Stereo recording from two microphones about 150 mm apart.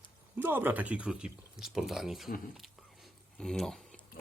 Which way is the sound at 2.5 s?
Centre (ahead or behind).